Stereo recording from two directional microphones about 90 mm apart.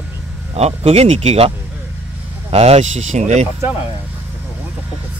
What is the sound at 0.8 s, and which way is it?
Speech, 90° right.